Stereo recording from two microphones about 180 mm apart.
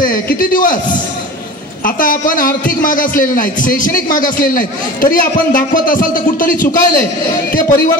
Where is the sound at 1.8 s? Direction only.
50° left (ahead or behind).